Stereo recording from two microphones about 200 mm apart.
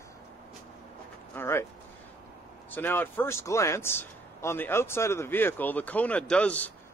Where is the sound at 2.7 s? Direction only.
10° left (ahead or behind).